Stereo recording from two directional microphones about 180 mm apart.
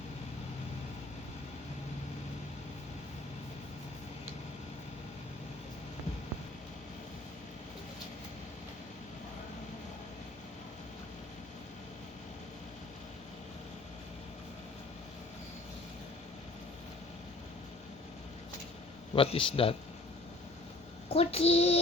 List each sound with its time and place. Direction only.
19.1 s child singing: 30° left (ahead or behind)
21.1 s child singing: 35° left (ahead or behind)